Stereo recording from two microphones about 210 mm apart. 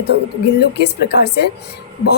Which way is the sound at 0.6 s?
50° left (ahead or behind).